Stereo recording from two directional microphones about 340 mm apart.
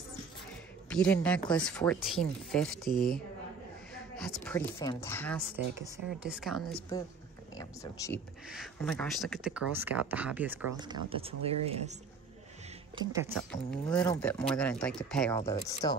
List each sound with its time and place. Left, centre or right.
0.8 s a woman's voice: centre
6.9 s speech: centre
12.9 s speech: centre
13.4 s speech: centre